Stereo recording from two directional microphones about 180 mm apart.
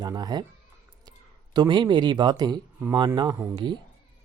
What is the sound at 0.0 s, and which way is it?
Speech, 25° right (ahead or behind).